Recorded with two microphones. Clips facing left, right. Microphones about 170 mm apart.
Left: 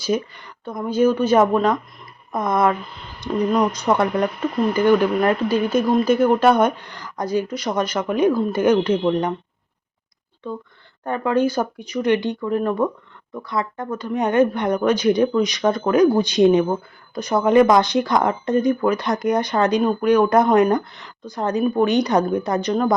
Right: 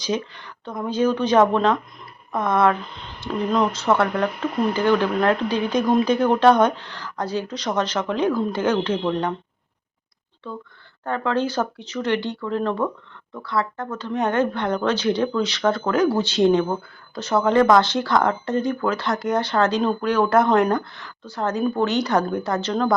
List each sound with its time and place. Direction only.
0.0 s speech: 10° left (ahead or behind)
11.0 s speech: 15° left (ahead or behind)